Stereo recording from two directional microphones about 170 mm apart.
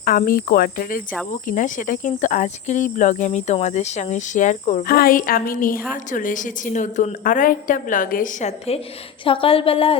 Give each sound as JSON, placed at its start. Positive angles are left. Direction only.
{"t": 0.0, "sound": "cricket", "side_deg": 55}
{"t": 1.3, "sound": "speech", "side_deg": 50}
{"t": 4.9, "sound": "cricket", "side_deg": 60}
{"t": 5.9, "sound": "a woman's voice", "side_deg": 50}